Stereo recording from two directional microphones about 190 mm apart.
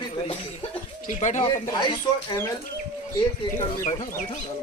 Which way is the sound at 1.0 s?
40° left (ahead or behind).